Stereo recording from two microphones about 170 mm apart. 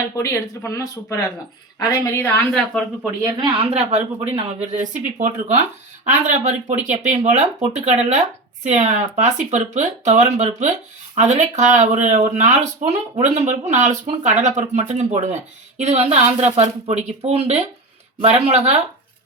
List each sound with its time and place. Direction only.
0.2 s speech: 15° left (ahead or behind)
3.2 s speech: 25° right (ahead or behind)